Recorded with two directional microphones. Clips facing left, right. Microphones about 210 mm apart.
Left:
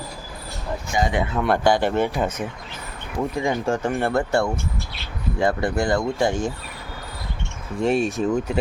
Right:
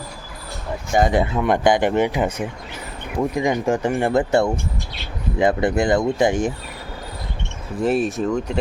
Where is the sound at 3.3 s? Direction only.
15° right (ahead or behind).